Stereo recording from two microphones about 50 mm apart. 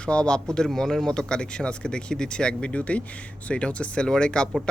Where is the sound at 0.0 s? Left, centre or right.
Left.